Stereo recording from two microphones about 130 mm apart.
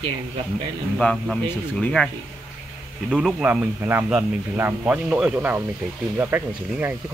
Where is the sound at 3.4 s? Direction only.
15° right (ahead or behind).